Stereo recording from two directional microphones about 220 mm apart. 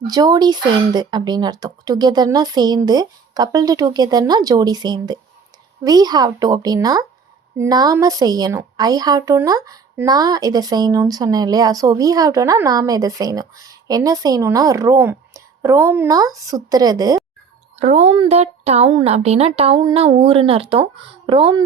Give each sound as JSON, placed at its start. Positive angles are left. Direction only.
{"t": 0.1, "sound": "a woman's voice", "side_deg": -20}
{"t": 17.7, "sound": "speech", "side_deg": -30}